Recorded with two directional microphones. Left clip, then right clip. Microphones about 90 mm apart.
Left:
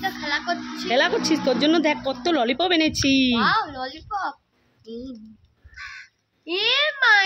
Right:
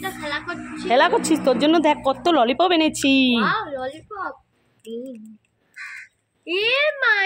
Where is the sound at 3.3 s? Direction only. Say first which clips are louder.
Left 1 dB; 65° left (ahead or behind).